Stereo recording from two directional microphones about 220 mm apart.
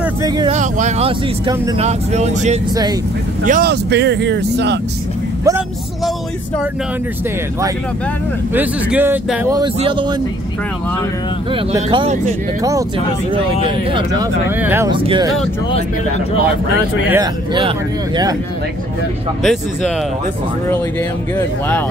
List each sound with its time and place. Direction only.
0.0 s vehicle: 15° right (ahead or behind)
0.5 s speech: 35° right (ahead or behind)
1.8 s speech: 30° right (ahead or behind)
3.4 s speech: 40° right (ahead or behind)
8.5 s speech: 10° right (ahead or behind)
9.8 s speech: 25° right (ahead or behind)
11.5 s speech: 20° right (ahead or behind)
14.6 s speech: 10° right (ahead or behind)
14.9 s speech: 20° right (ahead or behind)
17.1 s speech: 20° right (ahead or behind)
19.4 s speech: centre (ahead or behind)
21.4 s speech: 10° left (ahead or behind)